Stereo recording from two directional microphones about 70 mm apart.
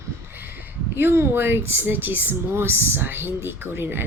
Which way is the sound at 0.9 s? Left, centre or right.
Right.